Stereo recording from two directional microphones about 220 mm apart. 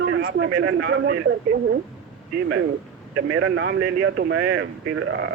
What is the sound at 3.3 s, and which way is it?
A woman's voice, 65° right (ahead or behind).